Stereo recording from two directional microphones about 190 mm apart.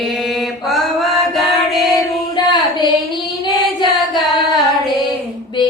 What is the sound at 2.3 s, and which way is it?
Singing, 20° left (ahead or behind).